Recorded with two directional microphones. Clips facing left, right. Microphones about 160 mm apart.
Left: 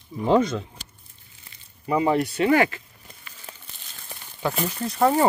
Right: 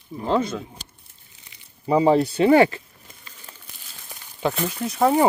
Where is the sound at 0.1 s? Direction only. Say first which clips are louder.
Left 2 dB; 25° right (ahead or behind).